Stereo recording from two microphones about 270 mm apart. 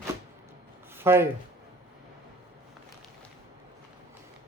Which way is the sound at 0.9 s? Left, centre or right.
Centre.